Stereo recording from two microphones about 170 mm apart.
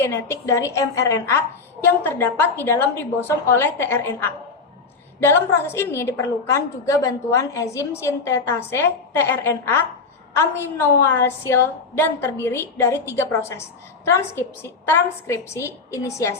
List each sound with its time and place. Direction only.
0.0 s a woman's voice: 15° left (ahead or behind)
5.7 s a woman's voice: 15° left (ahead or behind)